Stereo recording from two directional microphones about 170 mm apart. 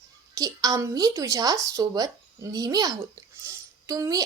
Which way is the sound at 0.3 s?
20° right (ahead or behind).